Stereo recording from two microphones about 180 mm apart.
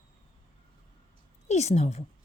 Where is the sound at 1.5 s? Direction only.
40° left (ahead or behind).